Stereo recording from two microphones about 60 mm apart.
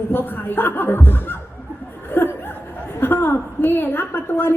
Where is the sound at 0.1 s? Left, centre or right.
Left.